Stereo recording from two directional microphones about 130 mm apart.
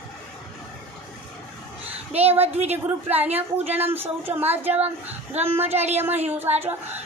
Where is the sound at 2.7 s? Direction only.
15° right (ahead or behind).